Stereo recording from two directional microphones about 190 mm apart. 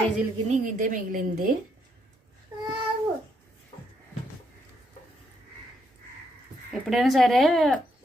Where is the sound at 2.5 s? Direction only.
15° right (ahead or behind).